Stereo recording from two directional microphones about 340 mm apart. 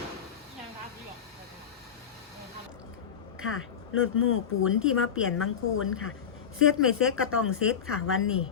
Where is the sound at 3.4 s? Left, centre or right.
Left.